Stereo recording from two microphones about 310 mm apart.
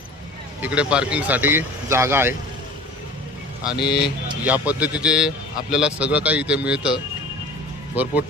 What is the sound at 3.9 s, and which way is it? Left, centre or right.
Speech, centre.